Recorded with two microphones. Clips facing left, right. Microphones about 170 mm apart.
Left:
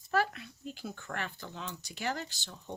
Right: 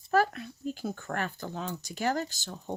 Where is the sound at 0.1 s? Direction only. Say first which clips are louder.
Right 5 dB; 45° right (ahead or behind).